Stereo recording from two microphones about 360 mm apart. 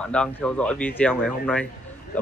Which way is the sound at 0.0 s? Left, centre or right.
Centre.